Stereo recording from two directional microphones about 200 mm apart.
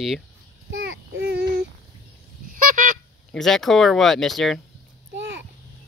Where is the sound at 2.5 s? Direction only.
40° right (ahead or behind).